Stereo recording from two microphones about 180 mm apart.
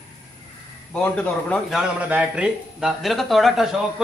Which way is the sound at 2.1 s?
5° right (ahead or behind).